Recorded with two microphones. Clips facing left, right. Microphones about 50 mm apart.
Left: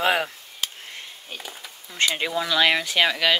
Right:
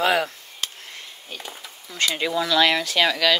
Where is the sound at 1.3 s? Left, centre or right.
Centre.